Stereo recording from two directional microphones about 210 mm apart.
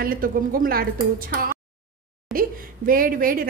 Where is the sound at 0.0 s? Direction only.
45° right (ahead or behind).